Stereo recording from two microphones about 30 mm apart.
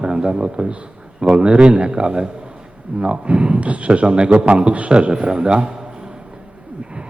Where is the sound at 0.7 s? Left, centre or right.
Right.